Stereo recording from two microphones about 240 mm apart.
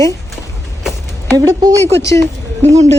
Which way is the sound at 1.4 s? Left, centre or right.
Centre.